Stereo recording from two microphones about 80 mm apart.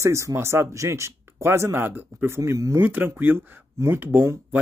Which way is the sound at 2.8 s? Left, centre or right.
Right.